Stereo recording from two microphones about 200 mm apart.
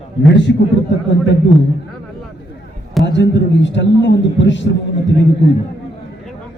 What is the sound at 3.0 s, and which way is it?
A man's voice, 60° left (ahead or behind).